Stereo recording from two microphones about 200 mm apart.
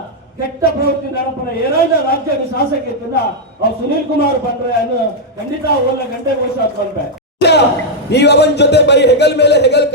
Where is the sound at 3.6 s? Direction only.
50° left (ahead or behind).